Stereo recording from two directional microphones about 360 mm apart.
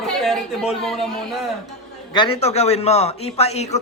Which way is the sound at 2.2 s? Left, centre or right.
Centre.